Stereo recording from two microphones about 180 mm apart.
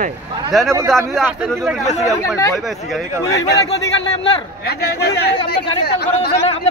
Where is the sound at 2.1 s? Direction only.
15° left (ahead or behind).